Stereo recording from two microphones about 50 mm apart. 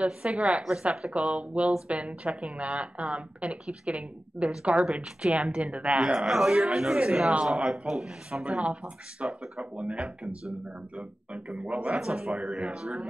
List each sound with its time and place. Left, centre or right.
0.0 s a woman's voice: centre
0.8 s a woman's voice: right
6.1 s speech: centre
8.3 s a woman's voice: right